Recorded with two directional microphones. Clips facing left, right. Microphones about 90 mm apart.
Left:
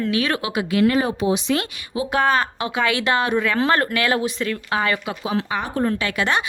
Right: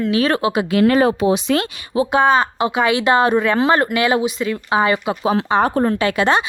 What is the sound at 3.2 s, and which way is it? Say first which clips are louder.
Speech: right 5 dB; 35° right (ahead or behind).